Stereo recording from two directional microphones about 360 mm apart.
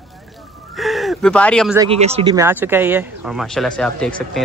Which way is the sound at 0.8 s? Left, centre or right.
Centre.